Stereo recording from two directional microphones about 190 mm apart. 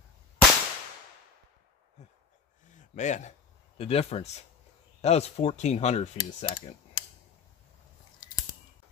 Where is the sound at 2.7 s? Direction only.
40° left (ahead or behind).